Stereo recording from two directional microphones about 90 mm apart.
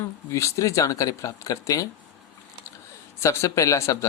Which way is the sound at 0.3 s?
35° left (ahead or behind).